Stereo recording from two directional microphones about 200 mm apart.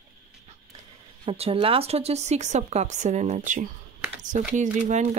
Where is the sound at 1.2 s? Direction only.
30° right (ahead or behind).